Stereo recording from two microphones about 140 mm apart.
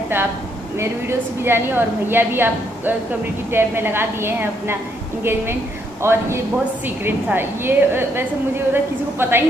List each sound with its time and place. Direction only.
0.7 s a woman's voice: 15° right (ahead or behind)
6.0 s a woman's voice: 20° right (ahead or behind)